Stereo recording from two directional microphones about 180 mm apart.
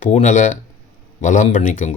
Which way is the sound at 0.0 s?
45° left (ahead or behind).